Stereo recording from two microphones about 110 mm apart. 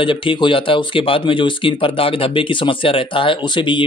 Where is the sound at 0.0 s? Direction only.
50° left (ahead or behind).